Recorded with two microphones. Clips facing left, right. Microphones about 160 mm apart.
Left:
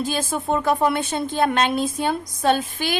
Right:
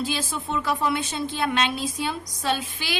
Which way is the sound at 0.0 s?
50° left (ahead or behind).